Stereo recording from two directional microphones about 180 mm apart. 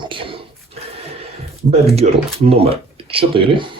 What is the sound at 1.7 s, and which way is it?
Speech, 35° right (ahead or behind).